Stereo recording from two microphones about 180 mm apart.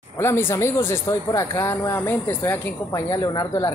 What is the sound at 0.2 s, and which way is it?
Speech, 15° left (ahead or behind).